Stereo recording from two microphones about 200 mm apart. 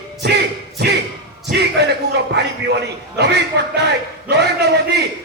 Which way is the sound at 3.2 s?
60° right (ahead or behind).